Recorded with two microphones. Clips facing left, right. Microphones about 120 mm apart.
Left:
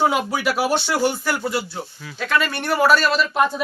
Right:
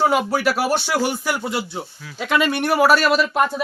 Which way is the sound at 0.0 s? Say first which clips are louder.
Right 2 dB; 5° right (ahead or behind).